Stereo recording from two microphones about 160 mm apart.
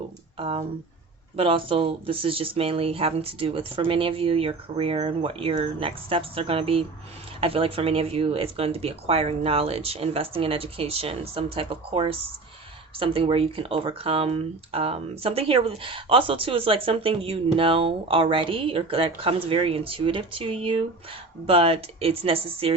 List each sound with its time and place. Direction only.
0.3 s speech: 35° right (ahead or behind)